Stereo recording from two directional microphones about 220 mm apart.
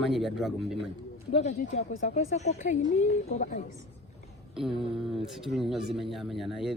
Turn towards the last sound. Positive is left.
turn(degrees=0)  # may be behind; listen again after turning